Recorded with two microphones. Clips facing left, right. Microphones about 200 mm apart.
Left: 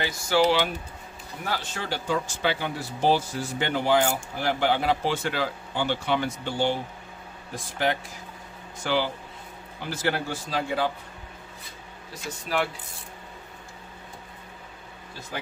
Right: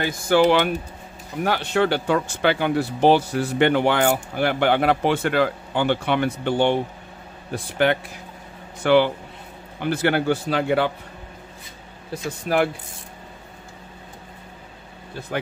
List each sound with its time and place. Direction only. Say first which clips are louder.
0.0 s speech: right 5 dB; 55° right (ahead or behind)
12.1 s speech: right 7 dB; 55° right (ahead or behind)